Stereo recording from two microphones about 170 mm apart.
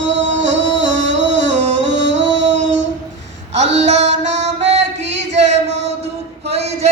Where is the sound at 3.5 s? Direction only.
90° right.